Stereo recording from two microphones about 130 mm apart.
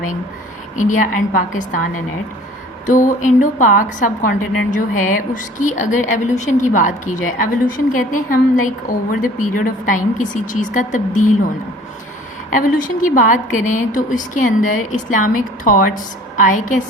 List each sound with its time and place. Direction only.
0.8 s a woman's voice: 80° left
2.8 s a woman's voice: 80° left
7.9 s a woman's voice: 90° left
12.5 s a woman's voice: 90° left